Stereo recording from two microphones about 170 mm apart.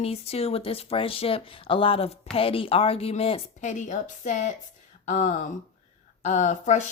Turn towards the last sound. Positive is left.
turn(degrees=45)  # may be behind; listen again after turning